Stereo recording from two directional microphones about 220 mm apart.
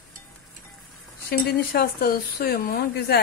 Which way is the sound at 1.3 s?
40° left (ahead or behind).